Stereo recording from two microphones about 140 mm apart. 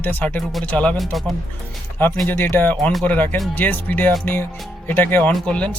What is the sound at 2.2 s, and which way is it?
Speech, 15° left (ahead or behind).